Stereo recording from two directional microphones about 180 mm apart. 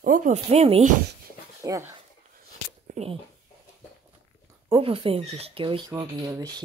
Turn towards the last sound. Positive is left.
turn(degrees=-20)  # may be behind; listen again after turning